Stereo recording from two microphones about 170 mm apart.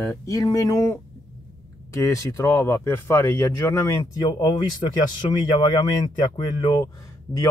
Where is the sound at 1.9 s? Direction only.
20° left (ahead or behind).